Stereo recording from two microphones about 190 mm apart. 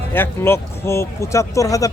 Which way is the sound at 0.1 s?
10° left (ahead or behind).